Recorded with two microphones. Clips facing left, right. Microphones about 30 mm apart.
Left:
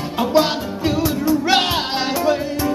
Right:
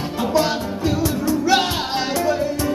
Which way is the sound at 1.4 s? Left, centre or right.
Left.